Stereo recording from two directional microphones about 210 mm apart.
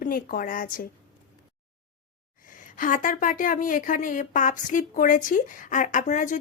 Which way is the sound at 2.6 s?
40° left (ahead or behind).